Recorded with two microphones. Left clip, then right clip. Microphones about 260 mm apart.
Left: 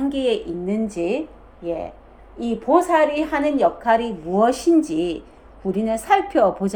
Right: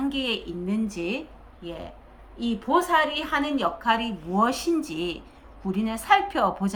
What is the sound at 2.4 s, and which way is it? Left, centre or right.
A woman's voice, centre.